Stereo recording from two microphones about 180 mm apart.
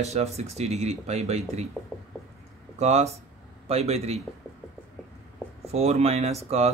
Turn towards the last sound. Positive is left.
turn(degrees=-35)  # may be behind; listen again after turning